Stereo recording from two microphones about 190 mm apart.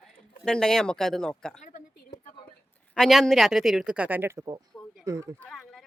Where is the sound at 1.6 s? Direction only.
45° left (ahead or behind).